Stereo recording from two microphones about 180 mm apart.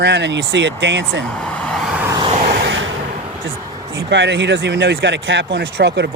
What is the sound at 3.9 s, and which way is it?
Speech, 75° right (ahead or behind).